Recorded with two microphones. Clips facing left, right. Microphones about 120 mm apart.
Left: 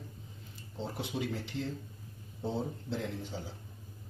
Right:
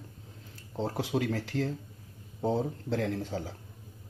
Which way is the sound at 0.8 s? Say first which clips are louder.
Right 6 dB; 90° right.